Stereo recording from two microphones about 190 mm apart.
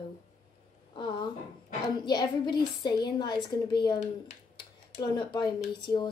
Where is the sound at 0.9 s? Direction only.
25° left (ahead or behind).